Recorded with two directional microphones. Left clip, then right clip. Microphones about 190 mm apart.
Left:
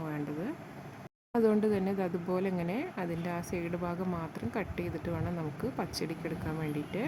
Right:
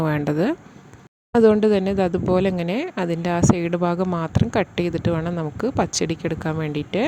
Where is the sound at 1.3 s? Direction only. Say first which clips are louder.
Right 13 dB; 35° right (ahead or behind).